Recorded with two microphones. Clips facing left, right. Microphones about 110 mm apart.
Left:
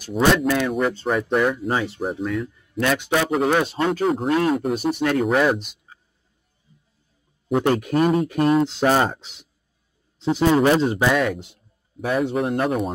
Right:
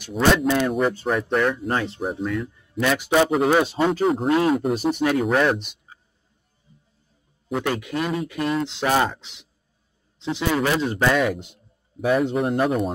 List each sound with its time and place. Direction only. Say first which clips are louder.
0.6 s speech: right 1 dB; centre (ahead or behind)
7.5 s speech: left 6 dB; 35° left (ahead or behind)
10.6 s speech: left 5 dB; 25° left (ahead or behind)
11.0 s speech: even; centre (ahead or behind)